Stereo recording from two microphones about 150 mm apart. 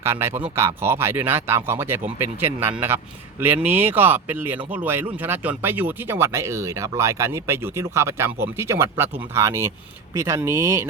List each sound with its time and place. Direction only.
0.0 s speech: 15° right (ahead or behind)